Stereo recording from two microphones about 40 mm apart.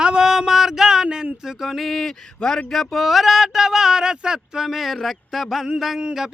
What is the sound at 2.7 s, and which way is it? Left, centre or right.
Speech, centre.